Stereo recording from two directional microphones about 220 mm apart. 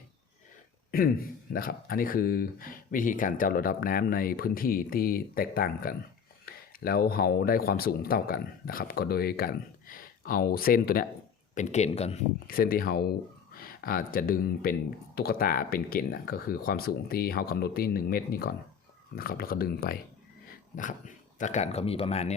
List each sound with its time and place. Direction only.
0.9 s speech: 40° left (ahead or behind)
12.5 s speech: 40° left (ahead or behind)
21.3 s speech: 35° left (ahead or behind)